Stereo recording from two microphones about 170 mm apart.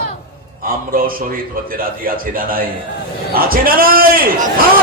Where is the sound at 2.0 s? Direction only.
60° right (ahead or behind).